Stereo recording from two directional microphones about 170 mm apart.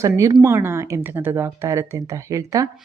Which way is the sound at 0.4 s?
15° right (ahead or behind).